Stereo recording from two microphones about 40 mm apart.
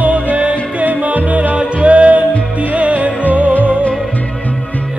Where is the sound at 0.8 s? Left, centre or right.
Right.